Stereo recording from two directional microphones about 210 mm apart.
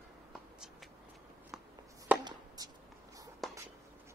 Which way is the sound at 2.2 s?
20° right (ahead or behind).